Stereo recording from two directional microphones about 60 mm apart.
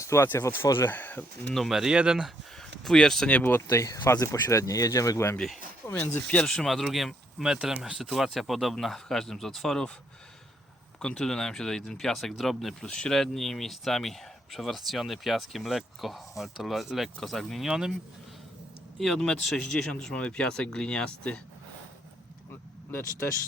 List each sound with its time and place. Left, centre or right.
0.0 s speech: left
0.9 s speech: left
1.7 s speech: centre
2.6 s speech: centre
3.7 s speech: left
5.8 s speech: left
6.2 s speech: centre
6.7 s speech: centre
8.1 s speech: centre
11.0 s speech: centre
12.8 s speech: centre
17.7 s speech: centre
18.9 s speech: centre
22.9 s speech: left